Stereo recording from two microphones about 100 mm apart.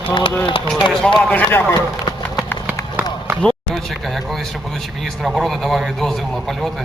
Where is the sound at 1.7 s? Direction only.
45° left (ahead or behind).